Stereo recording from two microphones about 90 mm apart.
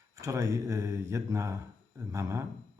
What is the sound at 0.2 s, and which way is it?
Speech, 35° right (ahead or behind).